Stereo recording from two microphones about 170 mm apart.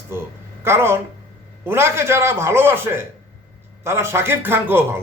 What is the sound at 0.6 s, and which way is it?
A man's voice, 15° right (ahead or behind).